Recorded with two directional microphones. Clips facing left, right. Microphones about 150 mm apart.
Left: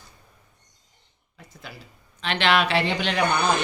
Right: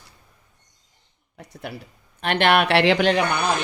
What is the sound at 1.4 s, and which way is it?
Speech, 65° right (ahead or behind).